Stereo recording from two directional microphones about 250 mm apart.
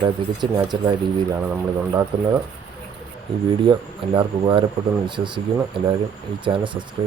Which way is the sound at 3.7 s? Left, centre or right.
Centre.